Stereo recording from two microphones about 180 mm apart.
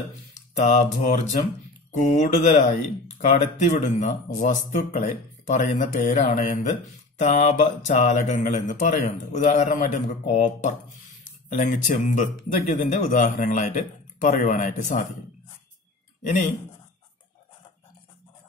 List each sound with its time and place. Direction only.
0.6 s speech: 40° left (ahead or behind)